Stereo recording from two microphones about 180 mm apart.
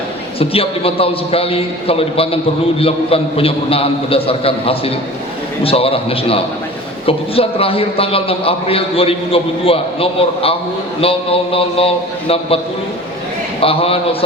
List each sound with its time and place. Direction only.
0.3 s a man's voice: 30° left (ahead or behind)
13.6 s a man's voice: 30° left (ahead or behind)